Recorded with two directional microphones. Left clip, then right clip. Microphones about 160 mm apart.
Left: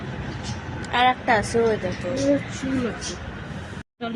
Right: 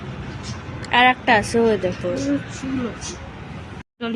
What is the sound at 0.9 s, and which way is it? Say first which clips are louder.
Speech: right 4 dB; 60° right (ahead or behind).